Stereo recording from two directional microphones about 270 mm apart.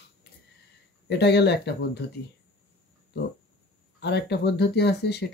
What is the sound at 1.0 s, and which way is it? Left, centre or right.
Speech, left.